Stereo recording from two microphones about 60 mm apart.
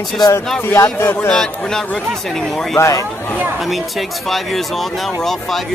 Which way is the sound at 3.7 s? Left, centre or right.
Centre.